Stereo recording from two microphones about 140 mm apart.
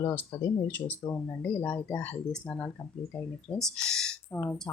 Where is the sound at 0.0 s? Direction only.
15° left (ahead or behind).